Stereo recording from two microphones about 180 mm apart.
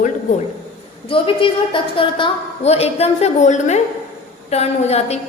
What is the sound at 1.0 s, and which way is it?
A woman's voice, 30° left (ahead or behind).